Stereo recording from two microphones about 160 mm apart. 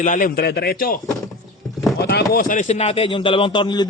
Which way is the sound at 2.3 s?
60° left (ahead or behind).